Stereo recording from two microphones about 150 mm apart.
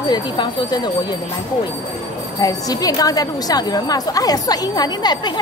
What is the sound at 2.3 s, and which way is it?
A woman's voice, 25° left (ahead or behind).